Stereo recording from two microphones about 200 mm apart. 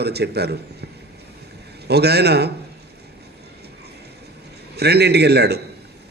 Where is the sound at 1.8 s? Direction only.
55° right (ahead or behind).